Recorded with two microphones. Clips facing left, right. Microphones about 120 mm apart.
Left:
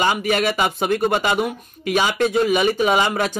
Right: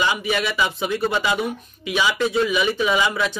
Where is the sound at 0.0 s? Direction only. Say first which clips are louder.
Left 3 dB; 50° left (ahead or behind).